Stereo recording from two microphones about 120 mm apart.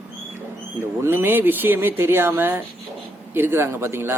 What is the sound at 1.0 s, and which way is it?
A man's voice, 20° right (ahead or behind).